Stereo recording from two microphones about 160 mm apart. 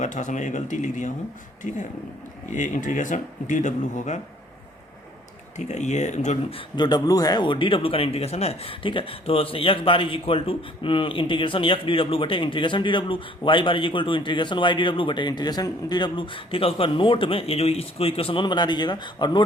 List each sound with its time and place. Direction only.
0.0 s speech: 50° left (ahead or behind)
2.5 s speech: 50° left (ahead or behind)
5.5 s speech: 45° left (ahead or behind)
6.7 s speech: 25° left (ahead or behind)